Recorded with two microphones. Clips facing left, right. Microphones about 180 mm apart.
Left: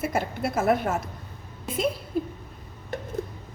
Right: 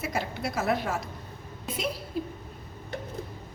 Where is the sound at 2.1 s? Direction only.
50° left (ahead or behind).